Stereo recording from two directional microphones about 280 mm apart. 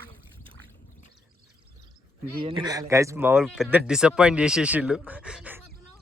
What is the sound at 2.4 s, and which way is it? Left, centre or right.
Speech, centre.